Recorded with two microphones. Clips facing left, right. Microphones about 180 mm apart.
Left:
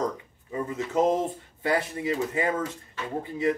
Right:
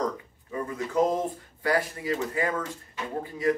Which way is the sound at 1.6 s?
25° left (ahead or behind).